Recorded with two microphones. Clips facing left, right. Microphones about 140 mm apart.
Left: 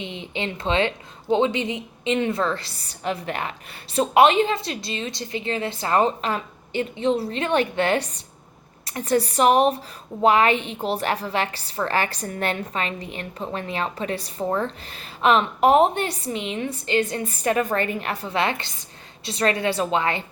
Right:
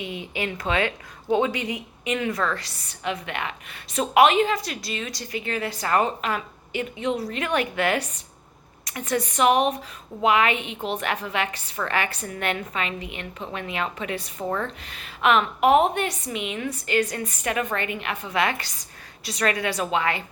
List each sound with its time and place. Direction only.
0.0 s a woman's voice: 25° left (ahead or behind)